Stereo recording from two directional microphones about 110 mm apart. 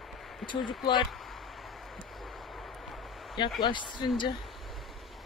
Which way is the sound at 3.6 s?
45° left (ahead or behind).